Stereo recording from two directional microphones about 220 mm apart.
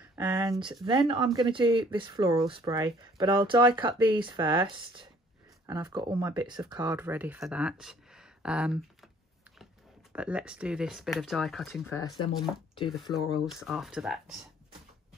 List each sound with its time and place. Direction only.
0.1 s speech: 10° right (ahead or behind)
6.8 s speech: 10° right (ahead or behind)
10.1 s speech: 5° right (ahead or behind)
11.9 s speech: 15° left (ahead or behind)
13.7 s speech: centre (ahead or behind)